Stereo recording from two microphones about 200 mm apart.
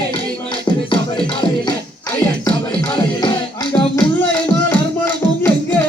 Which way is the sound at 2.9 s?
25° left (ahead or behind).